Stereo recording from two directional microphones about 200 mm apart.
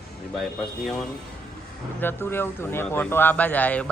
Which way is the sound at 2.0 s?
10° left (ahead or behind).